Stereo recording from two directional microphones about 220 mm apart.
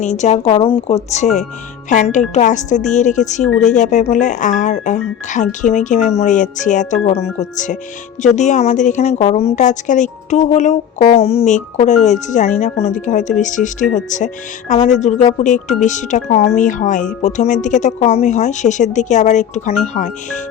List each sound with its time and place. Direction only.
0.0 s a woman's voice: 30° left (ahead or behind)